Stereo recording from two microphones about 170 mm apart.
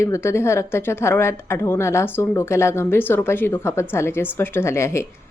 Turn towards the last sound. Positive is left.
turn(degrees=15)  # may be behind; listen again after turning